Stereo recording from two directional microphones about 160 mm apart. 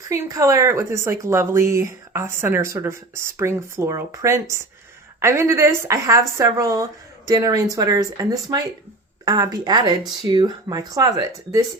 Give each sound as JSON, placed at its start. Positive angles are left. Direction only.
{"t": 0.1, "sound": "a woman's voice", "side_deg": -20}